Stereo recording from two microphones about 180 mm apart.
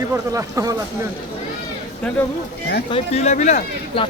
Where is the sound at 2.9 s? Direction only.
40° left (ahead or behind).